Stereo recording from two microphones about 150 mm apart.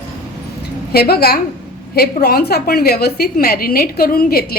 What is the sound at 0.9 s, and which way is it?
A woman's voice, 90° left.